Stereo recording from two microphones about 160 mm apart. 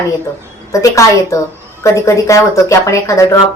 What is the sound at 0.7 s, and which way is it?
Speech, 20° left (ahead or behind).